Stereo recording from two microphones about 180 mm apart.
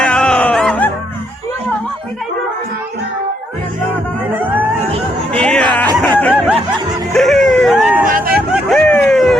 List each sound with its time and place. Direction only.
0.0 s music: 5° left (ahead or behind)
5.3 s chatter: 5° left (ahead or behind)
6.0 s snicker: 5° left (ahead or behind)
7.1 s a sound: centre (ahead or behind)
8.0 s hubbub: 50° right (ahead or behind)
8.7 s a sound: 5° left (ahead or behind)